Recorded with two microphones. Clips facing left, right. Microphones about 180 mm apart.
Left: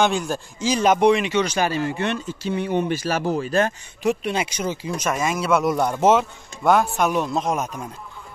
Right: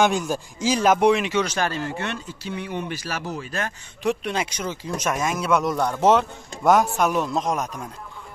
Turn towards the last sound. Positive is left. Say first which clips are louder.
# left 1 dB
turn(degrees=5)  # may be behind; listen again after turning